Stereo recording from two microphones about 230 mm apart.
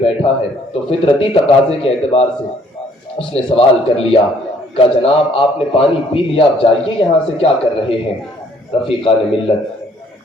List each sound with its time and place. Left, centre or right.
0.0 s a man's voice: left
3.3 s a man's voice: left